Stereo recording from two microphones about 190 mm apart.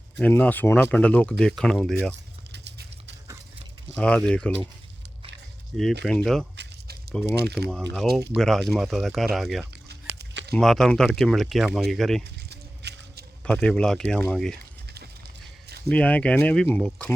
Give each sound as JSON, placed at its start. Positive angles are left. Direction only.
{"t": 0.2, "sound": "speech", "side_deg": 10}
{"t": 2.1, "sound": "a sound", "side_deg": -65}
{"t": 3.9, "sound": "speech", "side_deg": 5}
{"t": 6.1, "sound": "speech", "side_deg": 5}
{"t": 7.3, "sound": "speech", "side_deg": -60}
{"t": 8.4, "sound": "speech", "side_deg": 0}
{"t": 9.9, "sound": "a sound", "side_deg": -60}
{"t": 10.5, "sound": "speech", "side_deg": 0}
{"t": 12.2, "sound": "a sound", "side_deg": -60}
{"t": 13.4, "sound": "speech", "side_deg": 5}
{"t": 15.9, "sound": "speech", "side_deg": 5}